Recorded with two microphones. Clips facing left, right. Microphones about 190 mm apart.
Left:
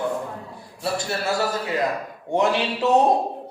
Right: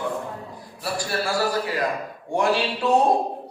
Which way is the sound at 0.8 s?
25° left (ahead or behind).